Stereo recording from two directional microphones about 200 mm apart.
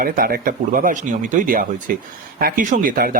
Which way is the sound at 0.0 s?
45° right (ahead or behind).